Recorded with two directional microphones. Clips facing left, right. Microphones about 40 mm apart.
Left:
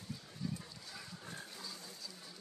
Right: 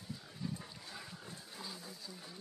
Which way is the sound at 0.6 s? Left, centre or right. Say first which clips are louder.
Right 1 dB; right.